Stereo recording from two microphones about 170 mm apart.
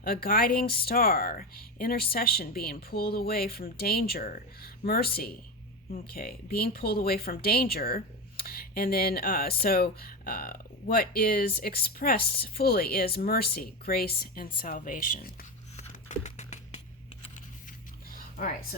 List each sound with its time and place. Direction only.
0.0 s speech: 60° left (ahead or behind)
15.7 s typing: 45° left (ahead or behind)
18.1 s a sound: 55° left (ahead or behind)